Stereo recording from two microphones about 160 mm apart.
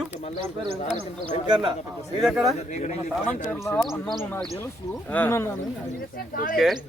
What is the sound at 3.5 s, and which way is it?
Speech, 10° left (ahead or behind).